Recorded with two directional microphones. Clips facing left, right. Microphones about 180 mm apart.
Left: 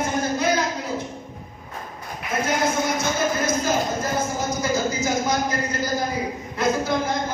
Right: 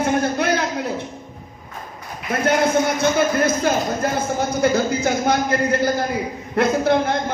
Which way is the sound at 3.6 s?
60° right (ahead or behind).